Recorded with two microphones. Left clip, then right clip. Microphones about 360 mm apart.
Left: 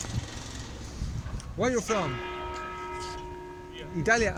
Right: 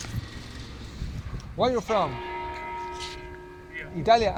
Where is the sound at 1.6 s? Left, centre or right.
Centre.